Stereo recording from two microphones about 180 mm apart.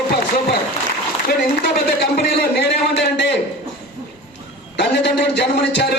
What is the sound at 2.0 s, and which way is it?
A man's voice, 65° left (ahead or behind).